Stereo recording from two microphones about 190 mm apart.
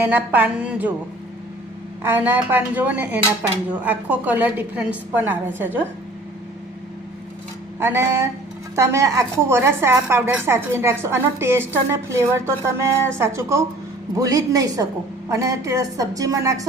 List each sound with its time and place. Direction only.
0.0 s a woman's voice: 10° right (ahead or behind)
2.0 s a woman's voice: 10° right (ahead or behind)
7.8 s a woman's voice: 15° right (ahead or behind)